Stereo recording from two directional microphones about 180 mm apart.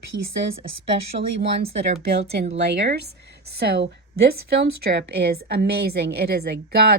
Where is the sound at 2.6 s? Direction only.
70° right (ahead or behind).